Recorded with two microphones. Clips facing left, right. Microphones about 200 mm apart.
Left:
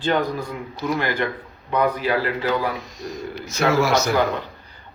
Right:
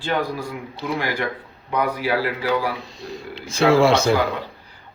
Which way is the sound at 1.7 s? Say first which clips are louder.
Left 1 dB; 10° right (ahead or behind).